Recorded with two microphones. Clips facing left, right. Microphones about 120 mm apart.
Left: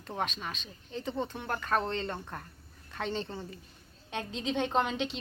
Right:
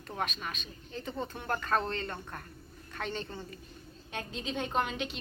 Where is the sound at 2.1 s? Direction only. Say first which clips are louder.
Left 2 dB; 10° left (ahead or behind).